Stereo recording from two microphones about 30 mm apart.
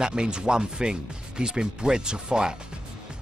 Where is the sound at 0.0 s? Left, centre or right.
Right.